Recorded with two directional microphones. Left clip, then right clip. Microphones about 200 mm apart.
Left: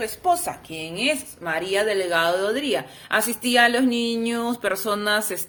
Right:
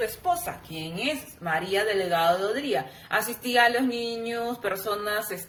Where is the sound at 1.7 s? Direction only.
55° left (ahead or behind).